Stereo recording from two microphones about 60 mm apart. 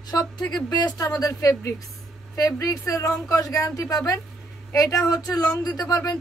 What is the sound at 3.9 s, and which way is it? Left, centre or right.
A man's voice, left.